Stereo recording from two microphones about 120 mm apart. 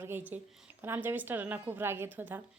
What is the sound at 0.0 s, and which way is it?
A woman's voice, 20° right (ahead or behind).